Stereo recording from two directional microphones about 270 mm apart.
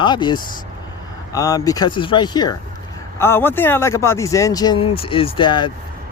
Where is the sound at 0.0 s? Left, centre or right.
Centre.